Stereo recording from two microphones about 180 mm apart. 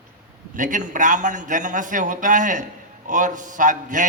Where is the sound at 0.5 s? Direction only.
45° right (ahead or behind).